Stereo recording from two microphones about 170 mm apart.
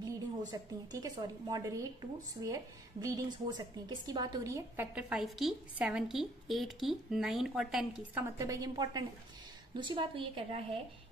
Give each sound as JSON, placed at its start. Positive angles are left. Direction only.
{"t": 0.5, "sound": "a woman's voice", "side_deg": -20}